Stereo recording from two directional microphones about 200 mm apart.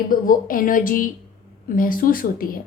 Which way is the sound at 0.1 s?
45° left (ahead or behind).